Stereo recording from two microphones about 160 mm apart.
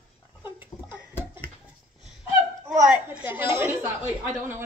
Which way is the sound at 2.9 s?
10° right (ahead or behind).